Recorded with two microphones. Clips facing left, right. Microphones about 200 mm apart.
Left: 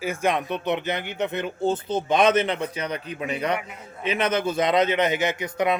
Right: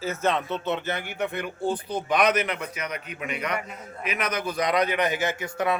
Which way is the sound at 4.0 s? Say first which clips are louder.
Left 6 dB; 25° left (ahead or behind).